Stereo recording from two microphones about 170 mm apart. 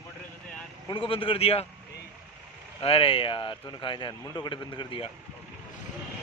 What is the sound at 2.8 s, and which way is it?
A man's voice, 35° left (ahead or behind).